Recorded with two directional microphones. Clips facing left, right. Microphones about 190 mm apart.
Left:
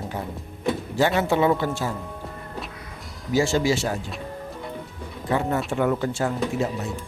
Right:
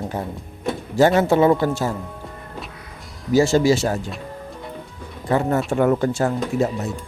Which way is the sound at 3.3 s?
40° right (ahead or behind).